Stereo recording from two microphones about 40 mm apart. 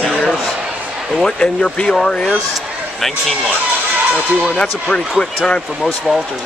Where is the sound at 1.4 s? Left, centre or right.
Centre.